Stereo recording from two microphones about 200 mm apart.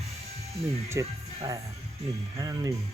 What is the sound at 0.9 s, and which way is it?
Speech, 15° right (ahead or behind).